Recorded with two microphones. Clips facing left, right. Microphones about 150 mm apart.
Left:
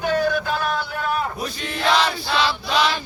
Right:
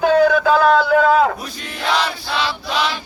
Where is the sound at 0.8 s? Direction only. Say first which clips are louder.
Right 11 dB; 90° right.